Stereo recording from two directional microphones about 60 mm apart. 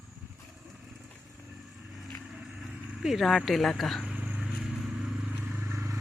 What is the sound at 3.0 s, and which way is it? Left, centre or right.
Speech, centre.